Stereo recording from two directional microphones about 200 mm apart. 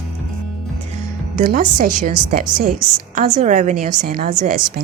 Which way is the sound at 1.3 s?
50° right (ahead or behind).